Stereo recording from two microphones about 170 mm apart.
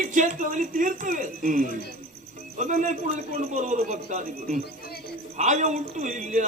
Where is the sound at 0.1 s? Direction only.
50° right (ahead or behind).